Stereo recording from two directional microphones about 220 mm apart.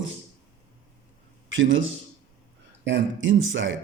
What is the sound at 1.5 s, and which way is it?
A man's voice, 60° right (ahead or behind).